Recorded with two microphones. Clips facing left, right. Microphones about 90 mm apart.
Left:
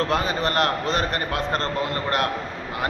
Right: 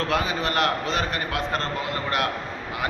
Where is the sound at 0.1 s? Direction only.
35° left (ahead or behind).